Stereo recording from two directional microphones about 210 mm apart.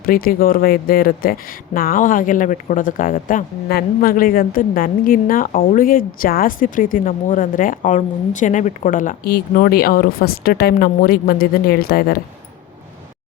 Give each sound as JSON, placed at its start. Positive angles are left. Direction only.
{"t": 0.0, "sound": "speech", "side_deg": 45}